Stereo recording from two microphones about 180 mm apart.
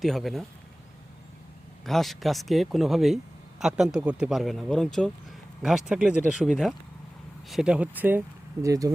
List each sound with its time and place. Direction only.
0.0 s speech: centre (ahead or behind)
1.8 s speech: centre (ahead or behind); by 8.9 s 20° right (ahead or behind)